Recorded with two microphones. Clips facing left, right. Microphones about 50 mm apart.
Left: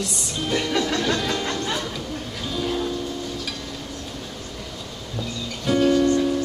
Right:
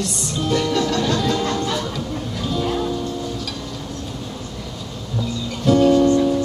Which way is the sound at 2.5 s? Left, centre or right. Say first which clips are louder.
Right 3 dB; centre.